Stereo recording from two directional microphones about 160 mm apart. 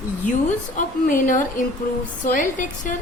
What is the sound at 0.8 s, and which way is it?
A woman's voice, 55° left (ahead or behind).